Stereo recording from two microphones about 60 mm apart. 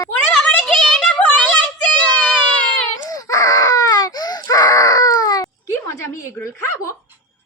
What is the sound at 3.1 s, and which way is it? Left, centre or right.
Baby cry, left.